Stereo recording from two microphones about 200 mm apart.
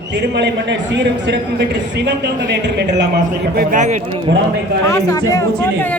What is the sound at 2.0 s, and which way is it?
A man's voice, 55° right (ahead or behind).